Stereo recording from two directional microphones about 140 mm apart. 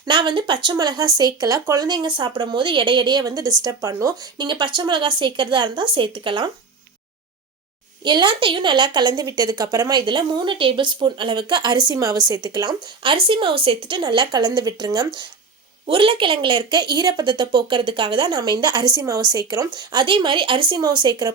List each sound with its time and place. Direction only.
0.0 s a woman's voice: 35° right (ahead or behind)
8.0 s a woman's voice: 35° right (ahead or behind)